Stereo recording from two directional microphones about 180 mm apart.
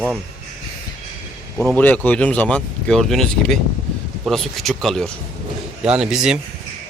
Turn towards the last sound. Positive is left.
turn(degrees=-5)  # may be behind; listen again after turning